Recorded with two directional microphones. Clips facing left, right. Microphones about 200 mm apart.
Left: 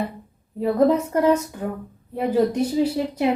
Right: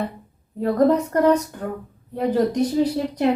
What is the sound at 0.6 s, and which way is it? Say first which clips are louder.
Speech: even; 5° left (ahead or behind).